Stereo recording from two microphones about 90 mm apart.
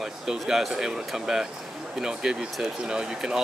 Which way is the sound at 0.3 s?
5° right (ahead or behind).